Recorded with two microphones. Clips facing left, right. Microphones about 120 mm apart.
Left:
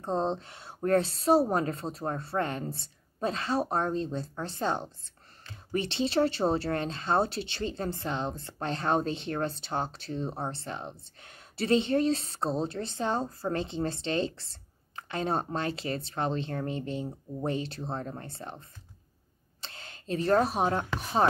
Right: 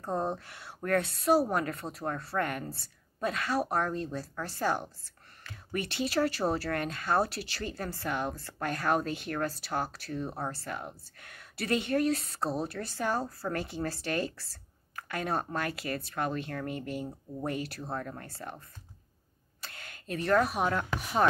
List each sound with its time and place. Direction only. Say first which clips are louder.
0.0 s speech: left 3 dB; 20° left (ahead or behind)
19.6 s speech: left 1 dB; 25° left (ahead or behind)